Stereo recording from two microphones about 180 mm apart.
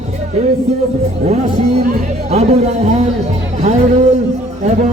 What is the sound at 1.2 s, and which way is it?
A man's voice, 40° right (ahead or behind).